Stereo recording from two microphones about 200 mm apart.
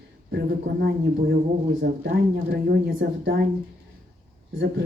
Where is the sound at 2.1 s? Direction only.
60° right (ahead or behind).